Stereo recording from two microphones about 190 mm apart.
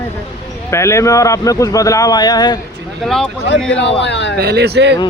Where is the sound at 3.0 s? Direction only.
Centre (ahead or behind).